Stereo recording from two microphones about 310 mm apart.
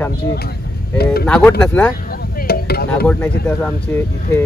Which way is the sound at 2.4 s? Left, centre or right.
Left.